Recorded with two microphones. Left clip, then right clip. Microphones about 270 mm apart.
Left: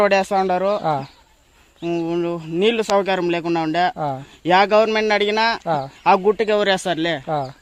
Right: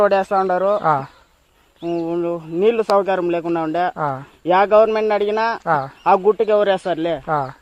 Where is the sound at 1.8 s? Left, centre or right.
Left.